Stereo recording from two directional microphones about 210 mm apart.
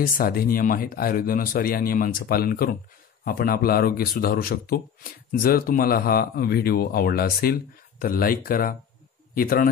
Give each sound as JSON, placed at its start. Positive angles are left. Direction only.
{"t": 0.0, "sound": "speech", "side_deg": 45}